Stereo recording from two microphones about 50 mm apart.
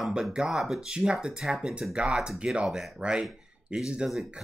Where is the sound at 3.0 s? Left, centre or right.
Centre.